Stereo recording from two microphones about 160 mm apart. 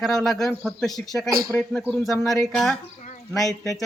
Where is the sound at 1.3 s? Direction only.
20° right (ahead or behind).